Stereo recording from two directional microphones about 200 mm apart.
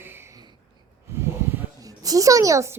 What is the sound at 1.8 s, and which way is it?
Speech, 15° right (ahead or behind).